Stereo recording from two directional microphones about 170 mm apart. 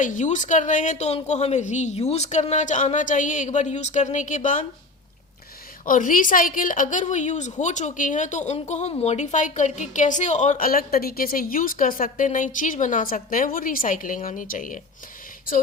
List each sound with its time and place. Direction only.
0.0 s a woman's voice: 45° left (ahead or behind)
5.8 s a woman's voice: 50° left (ahead or behind)